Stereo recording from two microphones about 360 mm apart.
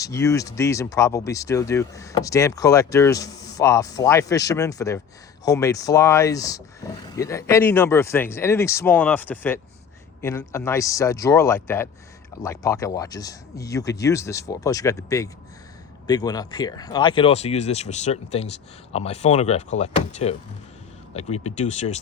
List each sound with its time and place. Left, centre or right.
0.0 s speech: centre